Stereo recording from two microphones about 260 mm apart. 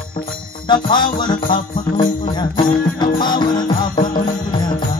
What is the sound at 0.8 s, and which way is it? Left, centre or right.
Music, centre.